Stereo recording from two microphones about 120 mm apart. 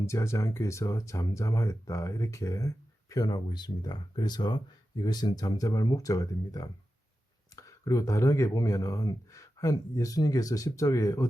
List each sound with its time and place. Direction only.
0.0 s speech: 25° left (ahead or behind)